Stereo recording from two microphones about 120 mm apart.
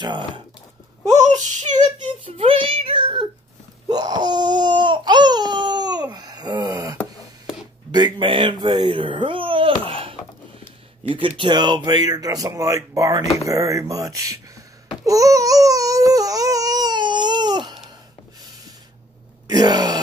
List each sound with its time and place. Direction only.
1.0 s speech: 80° right
2.2 s whimper: 50° right (ahead or behind)
3.9 s baby cry: 35° right (ahead or behind)
7.9 s speech: 40° right (ahead or behind)
9.8 s a sound: 50° right (ahead or behind)
11.1 s speech: 45° right (ahead or behind); by 14.4 s 30° right (ahead or behind)
15.0 s baby cry: 30° right (ahead or behind)
19.4 s groan: 35° right (ahead or behind)